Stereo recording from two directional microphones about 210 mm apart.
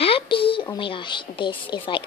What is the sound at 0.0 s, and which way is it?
A woman's voice, 25° left (ahead or behind).